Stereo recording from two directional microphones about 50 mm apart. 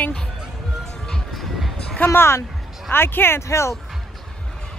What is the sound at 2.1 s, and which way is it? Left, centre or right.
Speech, left.